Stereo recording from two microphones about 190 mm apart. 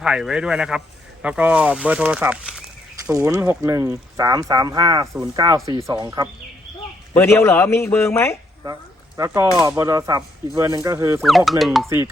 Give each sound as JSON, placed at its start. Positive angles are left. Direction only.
{"t": 0.0, "sound": "a man's voice", "side_deg": -5}
{"t": 3.1, "sound": "speech", "side_deg": -15}
{"t": 7.1, "sound": "speech", "side_deg": 10}
{"t": 9.1, "sound": "speech", "side_deg": -15}
{"t": 11.2, "sound": "a man's voice", "side_deg": 0}